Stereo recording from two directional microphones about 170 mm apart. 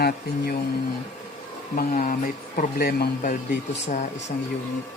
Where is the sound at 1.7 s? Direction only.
55° left (ahead or behind).